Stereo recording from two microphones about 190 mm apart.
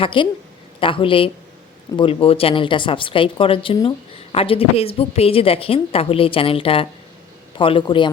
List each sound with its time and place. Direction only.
0.0 s speech: 25° left (ahead or behind)